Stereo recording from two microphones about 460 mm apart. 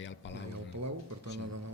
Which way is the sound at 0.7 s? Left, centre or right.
Right.